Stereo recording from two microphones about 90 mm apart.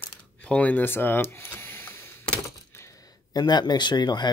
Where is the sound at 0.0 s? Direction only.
15° left (ahead or behind).